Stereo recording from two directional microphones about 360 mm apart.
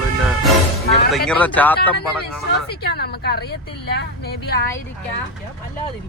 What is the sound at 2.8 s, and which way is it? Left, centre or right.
A woman's voice, left.